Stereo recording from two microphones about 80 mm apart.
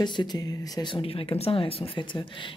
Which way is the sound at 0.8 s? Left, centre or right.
Left.